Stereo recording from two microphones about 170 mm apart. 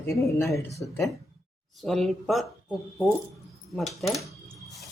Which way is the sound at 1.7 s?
Centre (ahead or behind).